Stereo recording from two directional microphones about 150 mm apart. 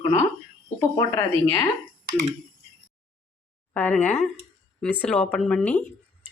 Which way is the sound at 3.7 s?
10° left (ahead or behind).